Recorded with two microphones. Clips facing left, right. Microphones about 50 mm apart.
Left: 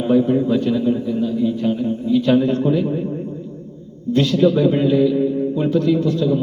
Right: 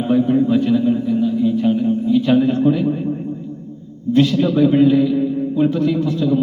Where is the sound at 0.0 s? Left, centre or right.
Centre.